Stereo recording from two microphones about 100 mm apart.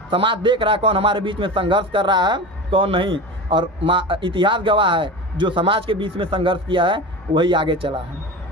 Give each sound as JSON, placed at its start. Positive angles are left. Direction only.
{"t": 0.1, "sound": "a man's voice", "side_deg": -55}